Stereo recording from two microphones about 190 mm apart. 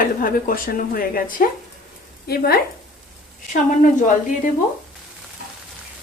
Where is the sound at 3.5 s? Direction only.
40° left (ahead or behind).